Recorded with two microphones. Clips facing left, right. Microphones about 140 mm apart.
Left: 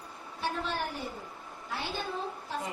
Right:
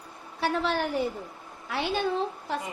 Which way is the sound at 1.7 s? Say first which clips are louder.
Right 8 dB; 80° right.